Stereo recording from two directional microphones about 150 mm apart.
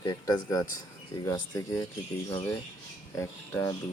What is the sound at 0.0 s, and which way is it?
Speech, 25° left (ahead or behind).